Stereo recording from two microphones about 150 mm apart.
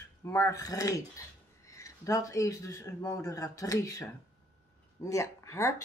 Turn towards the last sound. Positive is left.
turn(degrees=20)  # may be behind; listen again after turning